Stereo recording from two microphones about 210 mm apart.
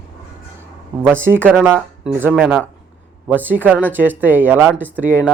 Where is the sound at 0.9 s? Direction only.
5° right (ahead or behind).